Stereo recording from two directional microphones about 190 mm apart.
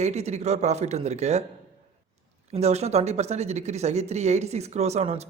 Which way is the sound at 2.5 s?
35° right (ahead or behind).